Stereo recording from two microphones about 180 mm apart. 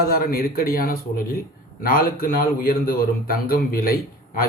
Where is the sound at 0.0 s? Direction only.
55° left (ahead or behind).